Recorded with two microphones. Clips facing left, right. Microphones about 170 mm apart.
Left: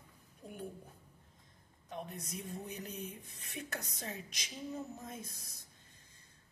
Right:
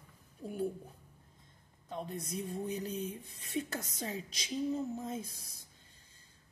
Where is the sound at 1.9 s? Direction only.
30° right (ahead or behind).